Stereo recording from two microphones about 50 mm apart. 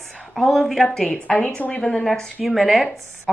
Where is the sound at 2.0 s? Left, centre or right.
Centre.